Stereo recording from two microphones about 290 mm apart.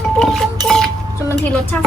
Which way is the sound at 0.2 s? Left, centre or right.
Centre.